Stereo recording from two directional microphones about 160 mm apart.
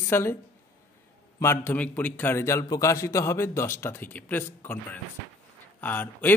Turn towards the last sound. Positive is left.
turn(degrees=10)  # may be behind; listen again after turning